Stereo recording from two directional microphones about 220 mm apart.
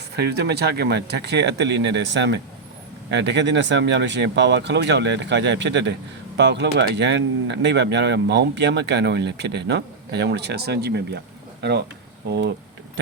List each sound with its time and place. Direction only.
0.1 s speech: 50° right (ahead or behind)